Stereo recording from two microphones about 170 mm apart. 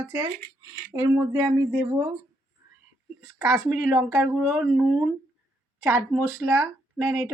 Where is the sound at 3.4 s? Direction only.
10° right (ahead or behind).